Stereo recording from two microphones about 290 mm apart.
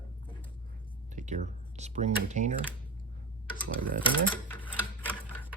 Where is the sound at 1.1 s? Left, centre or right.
Right.